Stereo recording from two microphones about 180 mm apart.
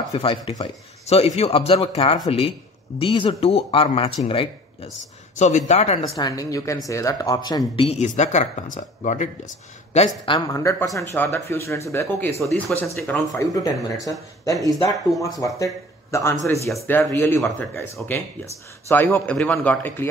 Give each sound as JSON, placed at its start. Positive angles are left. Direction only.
{"t": 0.1, "sound": "speech", "side_deg": 30}
{"t": 5.4, "sound": "speech", "side_deg": 40}
{"t": 6.1, "sound": "speech", "side_deg": 20}